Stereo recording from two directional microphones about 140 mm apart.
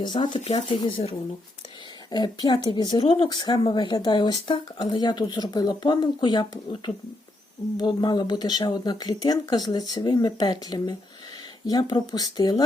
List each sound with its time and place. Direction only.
0.0 s speech: 30° left (ahead or behind)
0.4 s speech: 50° left (ahead or behind)
0.8 s speech: 40° left (ahead or behind)